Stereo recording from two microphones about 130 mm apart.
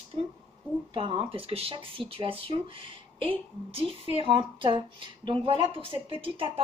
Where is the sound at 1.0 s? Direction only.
45° right (ahead or behind).